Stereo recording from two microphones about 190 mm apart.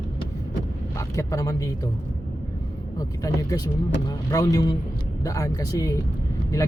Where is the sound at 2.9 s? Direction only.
20° left (ahead or behind).